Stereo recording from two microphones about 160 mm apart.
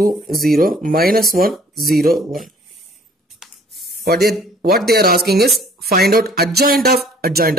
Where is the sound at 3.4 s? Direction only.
Centre (ahead or behind).